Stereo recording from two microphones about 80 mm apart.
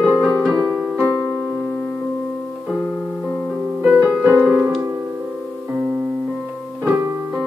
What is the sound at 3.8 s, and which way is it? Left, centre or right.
Music, centre.